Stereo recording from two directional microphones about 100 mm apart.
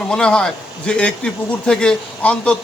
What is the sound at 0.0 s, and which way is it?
A man's voice, 10° left (ahead or behind).